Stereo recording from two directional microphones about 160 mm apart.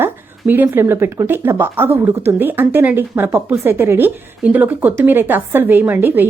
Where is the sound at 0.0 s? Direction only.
10° right (ahead or behind).